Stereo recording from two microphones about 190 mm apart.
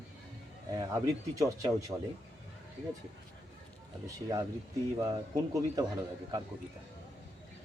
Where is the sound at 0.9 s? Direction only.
20° right (ahead or behind).